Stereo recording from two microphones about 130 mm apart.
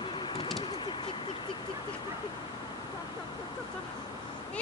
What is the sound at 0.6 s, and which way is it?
Bird, 40° left (ahead or behind).